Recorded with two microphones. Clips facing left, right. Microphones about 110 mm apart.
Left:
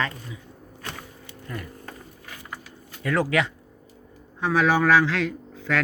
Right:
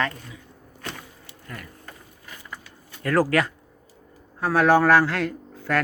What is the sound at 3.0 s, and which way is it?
Speech, centre (ahead or behind).